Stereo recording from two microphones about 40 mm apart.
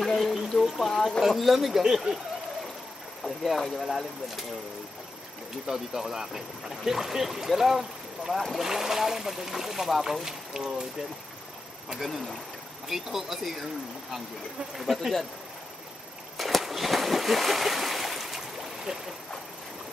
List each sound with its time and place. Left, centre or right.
0.0 s a sound: centre
0.7 s speech: centre
3.3 s speech: centre
5.7 s speech: centre
10.2 s speech: centre
11.9 s speech: centre
14.7 s speech: centre
16.3 s a sound: centre